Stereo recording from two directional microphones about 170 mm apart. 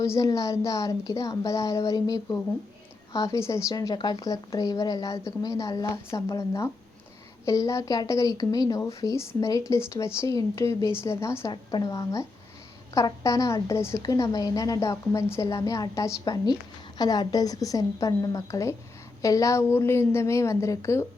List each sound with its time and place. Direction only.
0.0 s a woman's voice: 20° left (ahead or behind)